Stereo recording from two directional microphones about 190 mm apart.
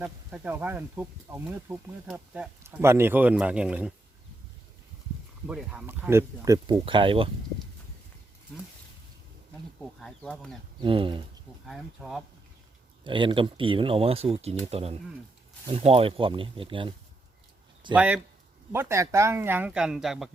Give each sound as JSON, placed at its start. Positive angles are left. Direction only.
{"t": 0.0, "sound": "speech", "side_deg": -10}
{"t": 5.5, "sound": "speech", "side_deg": -5}
{"t": 6.8, "sound": "speech", "side_deg": -25}
{"t": 10.0, "sound": "speech", "side_deg": 0}
{"t": 10.8, "sound": "speech", "side_deg": -25}
{"t": 11.6, "sound": "speech", "side_deg": 0}
{"t": 13.1, "sound": "speech", "side_deg": -25}
{"t": 17.9, "sound": "speech", "side_deg": -5}